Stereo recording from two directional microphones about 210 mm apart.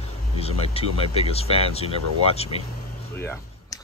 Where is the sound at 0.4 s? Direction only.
30° left (ahead or behind).